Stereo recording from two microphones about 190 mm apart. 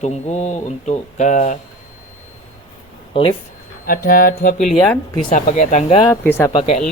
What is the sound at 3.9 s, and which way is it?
Music, 50° left (ahead or behind).